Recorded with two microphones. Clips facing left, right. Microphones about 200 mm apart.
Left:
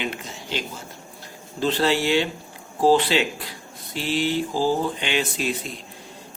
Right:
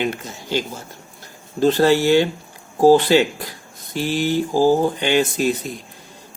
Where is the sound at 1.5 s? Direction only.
45° right (ahead or behind).